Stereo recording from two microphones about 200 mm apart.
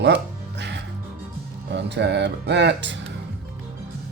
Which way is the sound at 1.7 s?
60° right (ahead or behind).